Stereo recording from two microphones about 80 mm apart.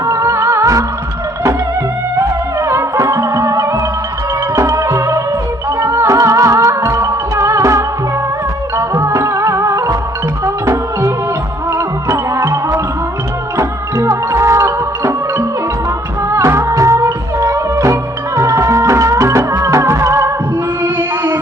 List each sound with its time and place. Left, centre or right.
0.0 s music: right
2.1 s music: right
16.3 s music: right